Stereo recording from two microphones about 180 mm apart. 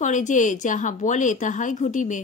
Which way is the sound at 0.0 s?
45° left (ahead or behind).